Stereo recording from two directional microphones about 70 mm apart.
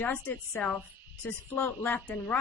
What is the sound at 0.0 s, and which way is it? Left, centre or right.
Speech, left.